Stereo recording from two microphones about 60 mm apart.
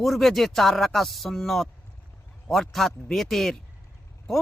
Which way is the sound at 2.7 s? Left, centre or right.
Centre.